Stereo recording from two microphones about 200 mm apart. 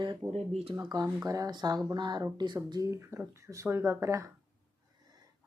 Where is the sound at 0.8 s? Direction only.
15° right (ahead or behind).